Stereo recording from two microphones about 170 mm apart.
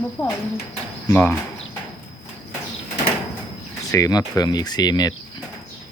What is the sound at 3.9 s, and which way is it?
Speech, 20° left (ahead or behind).